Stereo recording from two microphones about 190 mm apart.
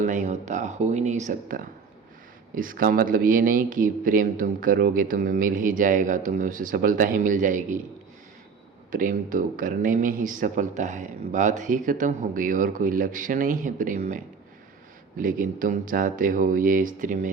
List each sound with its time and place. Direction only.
0.0 s speech: 40° right (ahead or behind)
8.9 s speech: 45° right (ahead or behind)
15.2 s speech: 45° right (ahead or behind)